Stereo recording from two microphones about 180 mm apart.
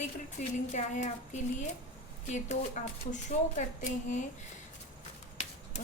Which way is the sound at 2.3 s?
40° left (ahead or behind).